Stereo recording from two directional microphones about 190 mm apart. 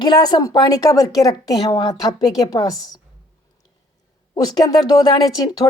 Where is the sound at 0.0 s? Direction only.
20° left (ahead or behind).